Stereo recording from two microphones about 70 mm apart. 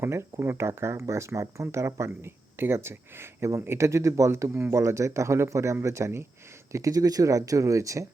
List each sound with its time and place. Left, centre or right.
0.0 s speech: right
6.7 s speech: right